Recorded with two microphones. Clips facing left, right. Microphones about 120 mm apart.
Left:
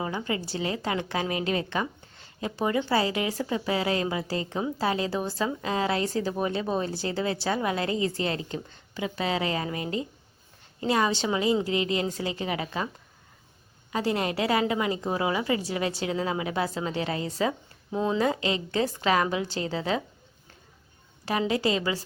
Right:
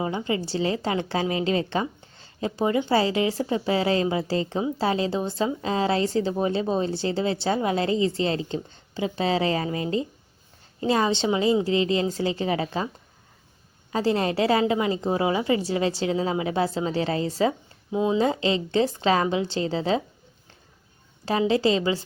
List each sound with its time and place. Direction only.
0.0 s a woman's voice: 25° right (ahead or behind)
13.9 s a woman's voice: 30° right (ahead or behind)
17.9 s speech: 10° right (ahead or behind)
18.2 s a woman's voice: 30° right (ahead or behind)
21.2 s a woman's voice: 30° right (ahead or behind)